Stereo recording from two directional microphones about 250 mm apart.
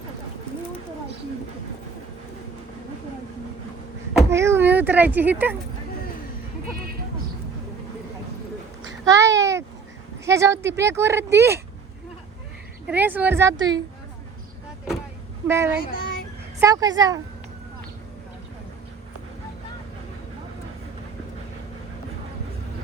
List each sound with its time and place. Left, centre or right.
4.3 s speech: centre
9.1 s a sound: centre
10.2 s speech: centre
12.9 s speech: centre
15.4 s speech: centre
15.9 s child singing: left
16.6 s speech: centre